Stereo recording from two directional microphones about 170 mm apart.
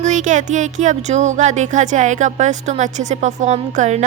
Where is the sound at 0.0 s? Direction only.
45° right (ahead or behind).